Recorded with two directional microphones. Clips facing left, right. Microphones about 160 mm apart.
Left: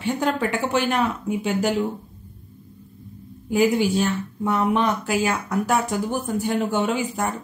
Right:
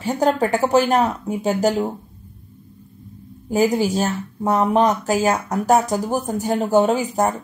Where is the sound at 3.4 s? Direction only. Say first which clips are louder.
Right 1 dB; 40° right (ahead or behind).